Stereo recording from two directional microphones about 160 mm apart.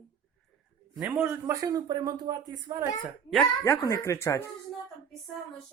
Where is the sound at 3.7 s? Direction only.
15° left (ahead or behind).